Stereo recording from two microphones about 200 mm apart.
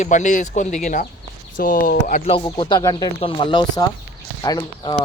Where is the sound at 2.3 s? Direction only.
20° left (ahead or behind).